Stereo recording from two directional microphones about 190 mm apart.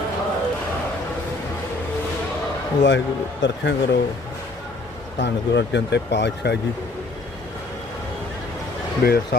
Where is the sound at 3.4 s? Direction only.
75° left (ahead or behind).